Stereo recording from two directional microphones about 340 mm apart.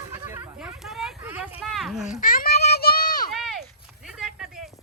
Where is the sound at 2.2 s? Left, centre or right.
Left.